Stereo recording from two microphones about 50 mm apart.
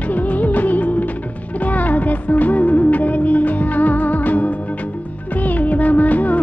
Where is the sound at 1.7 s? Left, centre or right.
Left.